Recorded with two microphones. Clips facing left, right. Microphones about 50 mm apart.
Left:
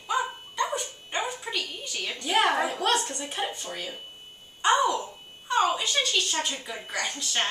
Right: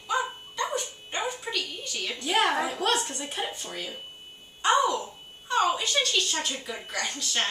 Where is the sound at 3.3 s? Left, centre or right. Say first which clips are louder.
Left 2 dB; centre.